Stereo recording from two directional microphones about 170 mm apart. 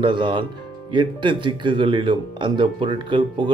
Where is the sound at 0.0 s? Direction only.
25° right (ahead or behind).